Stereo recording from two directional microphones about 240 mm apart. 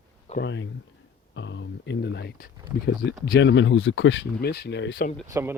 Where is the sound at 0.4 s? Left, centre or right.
Left.